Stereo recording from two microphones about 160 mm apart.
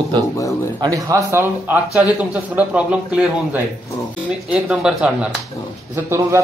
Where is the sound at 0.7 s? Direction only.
20° right (ahead or behind).